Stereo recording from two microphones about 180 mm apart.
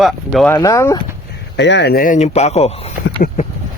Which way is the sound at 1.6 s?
75° left (ahead or behind).